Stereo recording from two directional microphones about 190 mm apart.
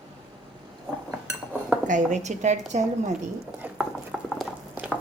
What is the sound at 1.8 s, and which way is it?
Speech, 40° right (ahead or behind).